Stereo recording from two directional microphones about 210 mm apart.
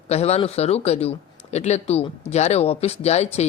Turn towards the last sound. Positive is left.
turn(degrees=30)  # may be behind; listen again after turning